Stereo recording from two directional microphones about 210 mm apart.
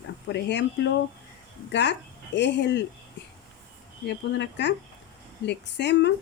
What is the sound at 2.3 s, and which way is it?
Speech, 55° left (ahead or behind).